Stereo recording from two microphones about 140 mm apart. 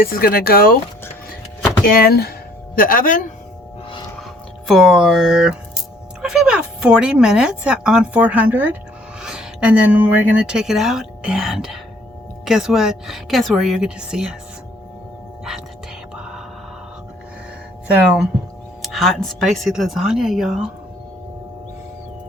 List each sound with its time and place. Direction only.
0.0 s speech: 90° left
1.8 s speech: 90° left; by 3.3 s 70° left (ahead or behind)
4.7 s a woman's voice: centre (ahead or behind)
18.8 s a woman's voice: centre (ahead or behind)